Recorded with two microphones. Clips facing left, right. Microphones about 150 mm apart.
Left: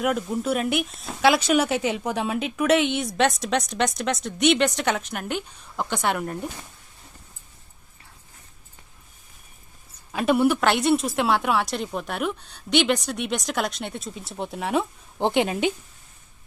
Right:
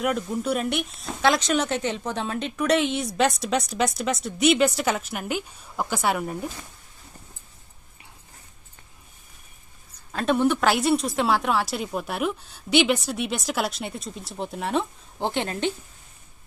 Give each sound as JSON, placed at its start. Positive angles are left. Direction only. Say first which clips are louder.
{"t": 0.0, "sound": "speech", "louder": "left 1 dB", "side_deg": 0}
{"t": 10.1, "sound": "a woman's voice", "louder": "left 2 dB", "side_deg": 10}
{"t": 15.2, "sound": "a woman's voice", "louder": "left 4 dB", "side_deg": 15}